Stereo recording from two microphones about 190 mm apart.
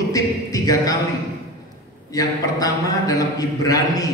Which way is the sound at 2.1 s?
20° left (ahead or behind).